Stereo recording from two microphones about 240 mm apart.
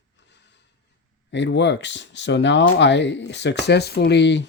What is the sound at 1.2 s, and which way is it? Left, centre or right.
Speech, left.